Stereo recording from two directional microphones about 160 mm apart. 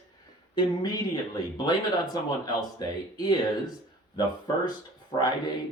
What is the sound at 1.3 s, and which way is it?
Speech, 25° left (ahead or behind).